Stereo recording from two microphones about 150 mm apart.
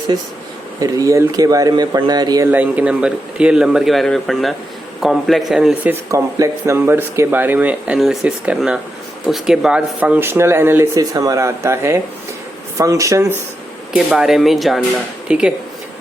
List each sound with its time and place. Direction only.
0.8 s speech: 20° right (ahead or behind)
2.5 s a man's voice: 10° right (ahead or behind)
14.2 s a man's voice: centre (ahead or behind)